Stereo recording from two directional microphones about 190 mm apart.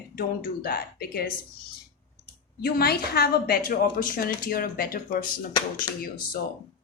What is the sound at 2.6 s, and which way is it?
A woman's voice, 55° left (ahead or behind).